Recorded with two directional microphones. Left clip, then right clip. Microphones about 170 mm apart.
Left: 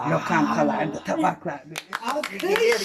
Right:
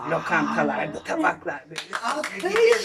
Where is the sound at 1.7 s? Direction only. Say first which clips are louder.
Even; 75° left (ahead or behind).